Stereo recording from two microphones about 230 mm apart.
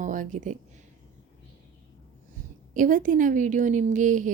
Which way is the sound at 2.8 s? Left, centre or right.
Right.